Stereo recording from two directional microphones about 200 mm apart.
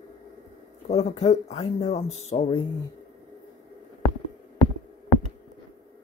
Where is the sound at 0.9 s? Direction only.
30° left (ahead or behind).